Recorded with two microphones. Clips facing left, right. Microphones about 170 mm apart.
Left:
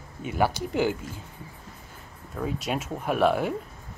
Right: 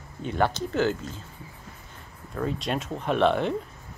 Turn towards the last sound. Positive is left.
turn(degrees=5)  # may be behind; listen again after turning